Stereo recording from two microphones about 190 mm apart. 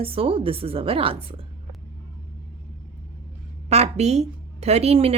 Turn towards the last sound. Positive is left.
turn(degrees=-35)  # may be behind; listen again after turning